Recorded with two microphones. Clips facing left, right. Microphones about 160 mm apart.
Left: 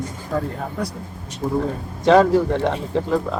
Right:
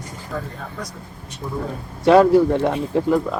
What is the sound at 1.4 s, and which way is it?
Speech, 40° left (ahead or behind).